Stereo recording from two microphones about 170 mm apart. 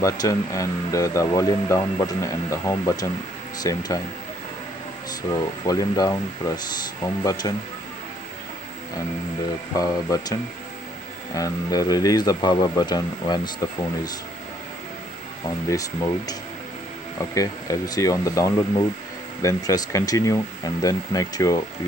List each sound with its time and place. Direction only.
0.0 s speech: 20° left (ahead or behind)
5.3 s speech: 20° left (ahead or behind)
9.8 s speech: 20° left (ahead or behind)
15.7 s speech: 20° left (ahead or behind)